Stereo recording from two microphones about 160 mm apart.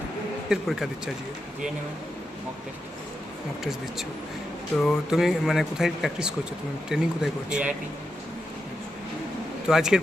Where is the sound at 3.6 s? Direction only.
Centre (ahead or behind).